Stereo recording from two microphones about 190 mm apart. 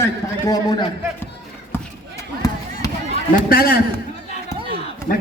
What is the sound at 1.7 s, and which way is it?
Basketball bounce, 10° left (ahead or behind).